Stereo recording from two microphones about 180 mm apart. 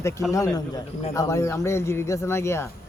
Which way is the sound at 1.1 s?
15° left (ahead or behind).